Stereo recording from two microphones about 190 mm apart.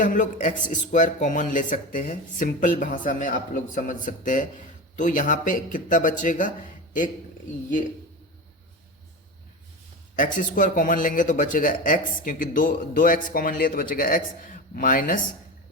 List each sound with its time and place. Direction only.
0.0 s speech: 45° left (ahead or behind)
10.2 s speech: 45° left (ahead or behind)